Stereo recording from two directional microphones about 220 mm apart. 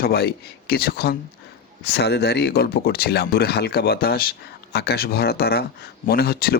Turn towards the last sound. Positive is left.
turn(degrees=45)  # may be behind; listen again after turning